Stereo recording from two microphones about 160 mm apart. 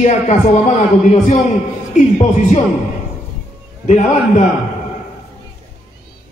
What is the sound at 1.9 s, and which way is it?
Speech, 45° left (ahead or behind).